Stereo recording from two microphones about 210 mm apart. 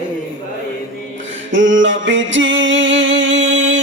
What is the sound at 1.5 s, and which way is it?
Music, 65° right (ahead or behind).